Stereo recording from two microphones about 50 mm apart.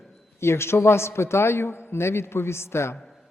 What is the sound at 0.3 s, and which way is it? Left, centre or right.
A man's voice, left.